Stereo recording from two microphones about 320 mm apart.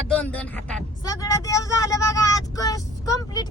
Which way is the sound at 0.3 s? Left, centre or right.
Centre.